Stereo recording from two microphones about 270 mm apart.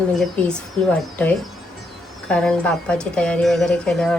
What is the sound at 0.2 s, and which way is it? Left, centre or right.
Speech, centre.